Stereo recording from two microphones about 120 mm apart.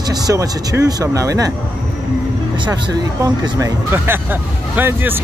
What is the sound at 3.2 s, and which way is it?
Speech, 25° right (ahead or behind).